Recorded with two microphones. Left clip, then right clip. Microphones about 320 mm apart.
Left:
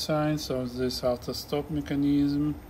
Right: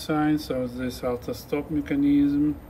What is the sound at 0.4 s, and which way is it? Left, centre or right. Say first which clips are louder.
Speech: right 1 dB; left.